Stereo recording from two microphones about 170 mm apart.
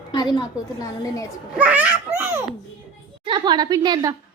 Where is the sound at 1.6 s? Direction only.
10° right (ahead or behind).